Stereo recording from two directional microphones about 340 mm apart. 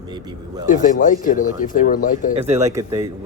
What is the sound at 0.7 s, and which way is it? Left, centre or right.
Speech, left.